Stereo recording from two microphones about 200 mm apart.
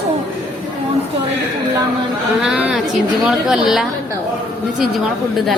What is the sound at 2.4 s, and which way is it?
A woman's voice, 5° right (ahead or behind).